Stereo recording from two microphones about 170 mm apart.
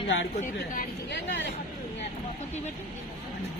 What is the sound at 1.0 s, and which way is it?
Speech, 90° left.